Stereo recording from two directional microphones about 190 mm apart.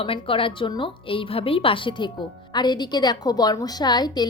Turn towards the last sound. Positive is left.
turn(degrees=20)  # may be behind; listen again after turning